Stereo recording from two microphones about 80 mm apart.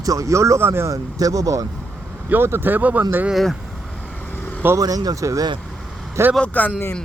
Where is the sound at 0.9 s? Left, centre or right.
Right.